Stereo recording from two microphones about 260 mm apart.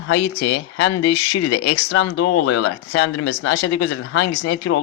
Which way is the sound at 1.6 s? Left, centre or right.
Left.